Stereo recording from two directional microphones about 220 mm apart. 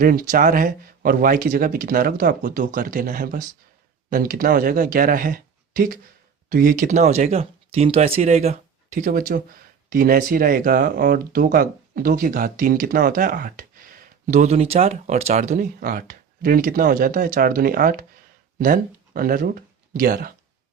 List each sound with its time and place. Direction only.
0.0 s speech: 40° right (ahead or behind)